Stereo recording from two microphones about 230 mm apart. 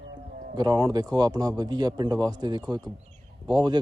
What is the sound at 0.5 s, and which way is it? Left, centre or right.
A man's voice, centre.